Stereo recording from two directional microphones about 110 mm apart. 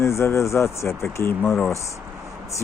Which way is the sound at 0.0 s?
25° left (ahead or behind).